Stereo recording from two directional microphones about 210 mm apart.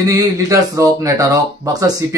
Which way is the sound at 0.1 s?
15° right (ahead or behind).